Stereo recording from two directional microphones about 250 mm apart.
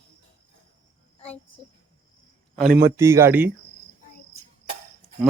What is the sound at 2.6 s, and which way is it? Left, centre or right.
Speech, right.